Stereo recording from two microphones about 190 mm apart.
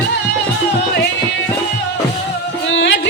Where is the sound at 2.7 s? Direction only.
70° left (ahead or behind).